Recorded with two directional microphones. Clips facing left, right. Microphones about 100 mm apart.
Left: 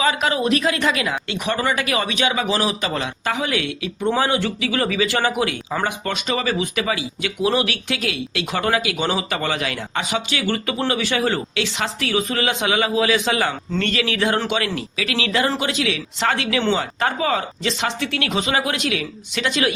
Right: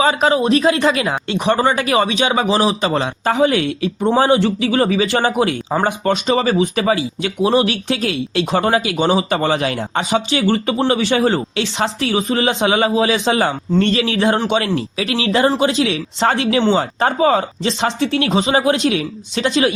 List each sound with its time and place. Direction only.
0.0 s speech: 30° right (ahead or behind)